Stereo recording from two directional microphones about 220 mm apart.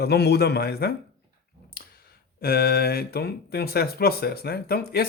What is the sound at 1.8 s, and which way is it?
Clicking, 40° left (ahead or behind).